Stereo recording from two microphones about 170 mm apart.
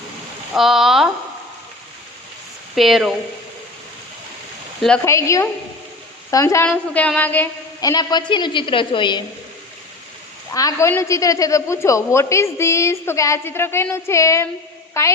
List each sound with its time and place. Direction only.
0.5 s speech: centre (ahead or behind)
2.7 s speech: centre (ahead or behind)
5.0 s a woman's voice: 15° left (ahead or behind)
6.7 s a woman's voice: 5° left (ahead or behind)
7.8 s a woman's voice: 20° left (ahead or behind)
10.5 s a woman's voice: 20° left (ahead or behind)